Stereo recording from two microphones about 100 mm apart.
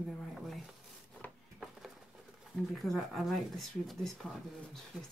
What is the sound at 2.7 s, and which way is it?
Speech, centre (ahead or behind).